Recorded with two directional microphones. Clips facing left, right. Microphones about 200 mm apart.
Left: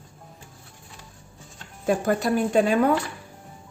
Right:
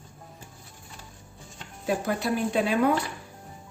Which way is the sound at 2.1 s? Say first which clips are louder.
Left 5 dB; 45° left (ahead or behind).